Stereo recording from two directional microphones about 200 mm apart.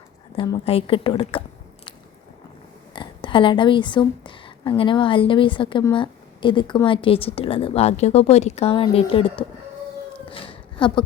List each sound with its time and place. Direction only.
0.3 s speech: 25° left (ahead or behind)
2.9 s a woman's voice: 25° left (ahead or behind)
10.2 s a sound: 25° left (ahead or behind)